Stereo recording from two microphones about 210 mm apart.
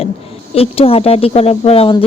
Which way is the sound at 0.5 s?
25° left (ahead or behind).